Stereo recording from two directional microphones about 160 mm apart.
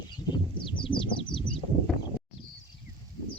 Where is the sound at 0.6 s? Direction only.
30° left (ahead or behind).